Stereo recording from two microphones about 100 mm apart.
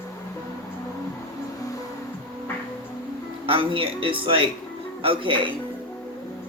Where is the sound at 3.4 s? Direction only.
65° right (ahead or behind).